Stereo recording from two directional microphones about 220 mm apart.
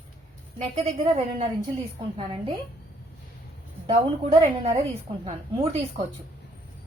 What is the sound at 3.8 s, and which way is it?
Speech, 25° right (ahead or behind).